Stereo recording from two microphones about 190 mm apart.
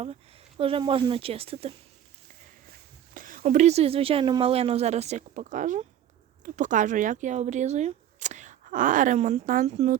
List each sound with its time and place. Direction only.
0.0 s speech: 30° right (ahead or behind)
3.2 s a woman's voice: 45° right (ahead or behind)